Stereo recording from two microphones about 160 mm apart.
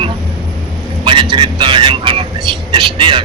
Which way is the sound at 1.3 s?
30° right (ahead or behind).